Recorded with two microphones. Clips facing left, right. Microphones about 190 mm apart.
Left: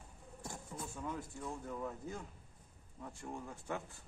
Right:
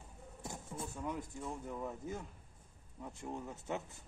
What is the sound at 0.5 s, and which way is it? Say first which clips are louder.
Speech: right 2 dB; 20° right (ahead or behind).